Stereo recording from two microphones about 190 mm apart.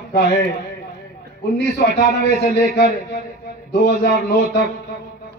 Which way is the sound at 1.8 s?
60° left (ahead or behind).